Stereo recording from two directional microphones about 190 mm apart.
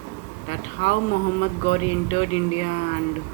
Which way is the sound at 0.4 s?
35° left (ahead or behind).